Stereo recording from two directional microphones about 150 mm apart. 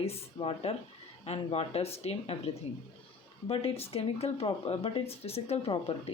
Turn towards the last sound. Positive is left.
turn(degrees=40)  # may be behind; listen again after turning